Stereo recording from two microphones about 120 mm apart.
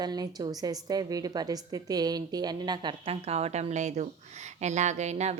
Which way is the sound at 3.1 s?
60° right (ahead or behind).